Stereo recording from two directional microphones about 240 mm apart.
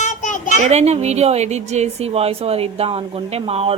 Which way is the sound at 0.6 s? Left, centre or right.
Right.